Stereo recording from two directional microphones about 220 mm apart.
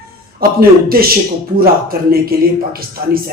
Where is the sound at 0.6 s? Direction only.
45° right (ahead or behind).